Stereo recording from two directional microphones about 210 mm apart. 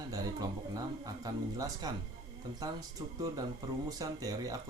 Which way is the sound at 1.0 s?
15° right (ahead or behind).